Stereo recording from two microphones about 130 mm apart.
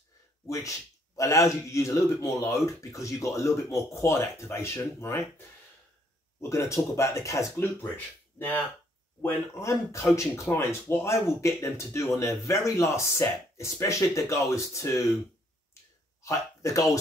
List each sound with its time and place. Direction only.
0.5 s speech: 25° left (ahead or behind)
6.5 s speech: 20° left (ahead or behind)
15.7 s finger snapping: 25° left (ahead or behind)